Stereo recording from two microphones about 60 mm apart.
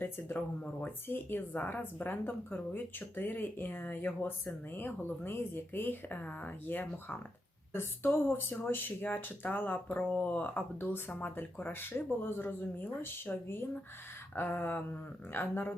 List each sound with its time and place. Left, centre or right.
0.0 s speech: left